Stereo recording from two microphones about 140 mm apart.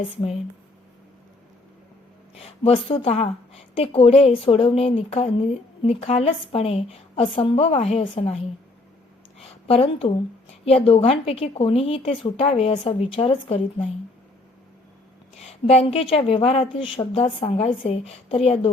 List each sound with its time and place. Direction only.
2.3 s a woman's voice: 45° left (ahead or behind)
9.4 s a sound: 45° left (ahead or behind)
10.7 s a woman's voice: 45° left (ahead or behind)
15.4 s a woman's voice: 50° left (ahead or behind)